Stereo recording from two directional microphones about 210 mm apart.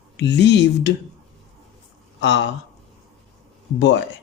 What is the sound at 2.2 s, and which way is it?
Speech, 55° left (ahead or behind).